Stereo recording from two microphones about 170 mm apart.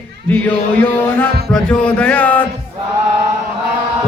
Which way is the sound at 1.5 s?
5° left (ahead or behind).